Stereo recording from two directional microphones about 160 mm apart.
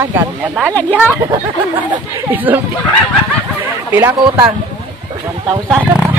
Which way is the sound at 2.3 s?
10° right (ahead or behind).